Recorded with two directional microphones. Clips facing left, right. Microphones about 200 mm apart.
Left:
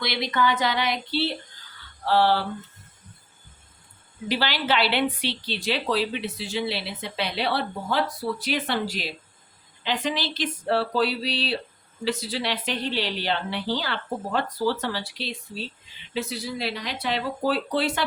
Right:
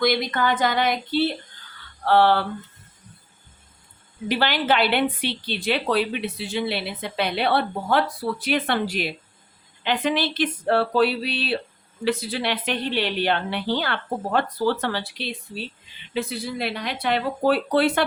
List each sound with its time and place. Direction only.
0.0 s a sound: 50° right (ahead or behind)
2.0 s a woman's voice: 55° right (ahead or behind)
4.3 s a woman's voice: 55° right (ahead or behind)